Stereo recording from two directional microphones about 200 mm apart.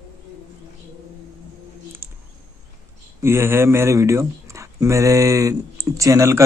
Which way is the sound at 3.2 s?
10° right (ahead or behind).